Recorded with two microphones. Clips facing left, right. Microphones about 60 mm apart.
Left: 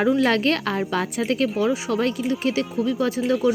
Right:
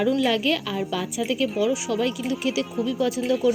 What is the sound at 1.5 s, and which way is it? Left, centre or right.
A woman's voice, left.